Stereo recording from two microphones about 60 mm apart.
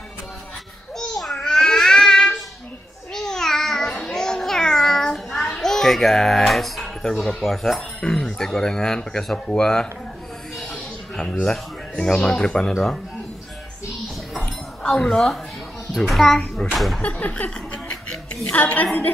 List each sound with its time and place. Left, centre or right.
0.9 s babbling: centre
8.0 s speech: centre
12.0 s speech: centre
12.7 s a child's voice: centre
14.8 s a child's voice: centre
17.0 s a woman's voice: left